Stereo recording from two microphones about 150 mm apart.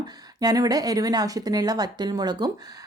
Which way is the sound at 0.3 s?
25° right (ahead or behind).